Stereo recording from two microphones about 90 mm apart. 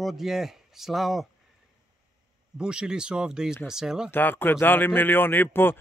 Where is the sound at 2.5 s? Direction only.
10° right (ahead or behind).